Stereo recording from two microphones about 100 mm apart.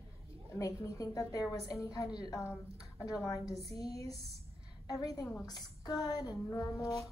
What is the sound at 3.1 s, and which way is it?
Speech, 35° left (ahead or behind).